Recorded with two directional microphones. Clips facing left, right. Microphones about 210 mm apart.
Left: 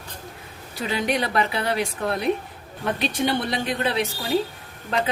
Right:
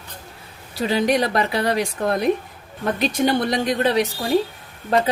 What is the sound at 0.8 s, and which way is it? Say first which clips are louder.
A woman's voice: right 5 dB; 40° right (ahead or behind).